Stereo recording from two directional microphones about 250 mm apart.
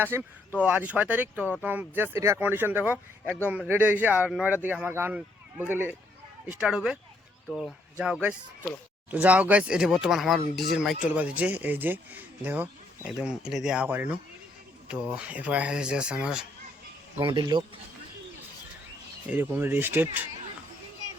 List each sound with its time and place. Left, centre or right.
0.0 s speech: centre
17.2 s speech: centre
19.3 s speech: centre